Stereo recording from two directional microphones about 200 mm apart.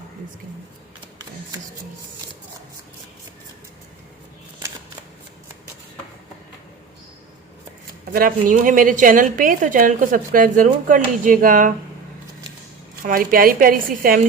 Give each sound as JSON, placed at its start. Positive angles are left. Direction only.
{"t": 8.1, "sound": "a woman's voice", "side_deg": -45}
{"t": 13.0, "sound": "a woman's voice", "side_deg": -45}